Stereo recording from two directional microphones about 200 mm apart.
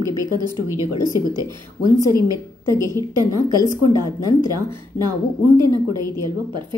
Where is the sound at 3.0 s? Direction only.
20° right (ahead or behind).